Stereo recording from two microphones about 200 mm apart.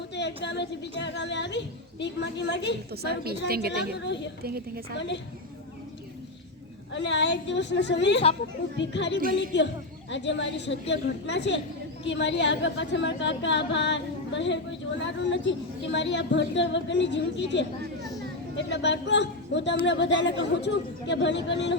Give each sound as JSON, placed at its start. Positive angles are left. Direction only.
{"t": 0.1, "sound": "a woman's voice", "side_deg": 60}
{"t": 2.9, "sound": "a woman's voice", "side_deg": -50}
{"t": 3.9, "sound": "a woman's voice", "side_deg": 60}
{"t": 6.9, "sound": "a woman's voice", "side_deg": 60}
{"t": 8.2, "sound": "speech", "side_deg": 30}
{"t": 8.8, "sound": "a woman's voice", "side_deg": 60}